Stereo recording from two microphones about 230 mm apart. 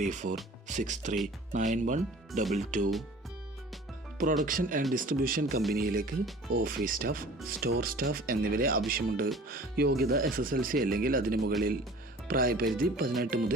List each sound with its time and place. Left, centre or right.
0.0 s speech: right
4.2 s speech: right